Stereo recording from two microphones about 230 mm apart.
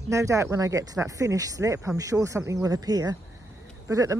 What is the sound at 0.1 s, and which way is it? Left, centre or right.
Speech, centre.